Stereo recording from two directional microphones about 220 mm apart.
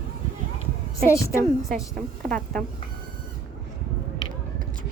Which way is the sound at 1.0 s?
15° left (ahead or behind).